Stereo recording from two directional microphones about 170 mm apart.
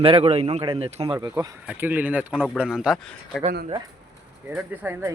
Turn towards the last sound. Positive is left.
turn(degrees=-10)  # may be behind; listen again after turning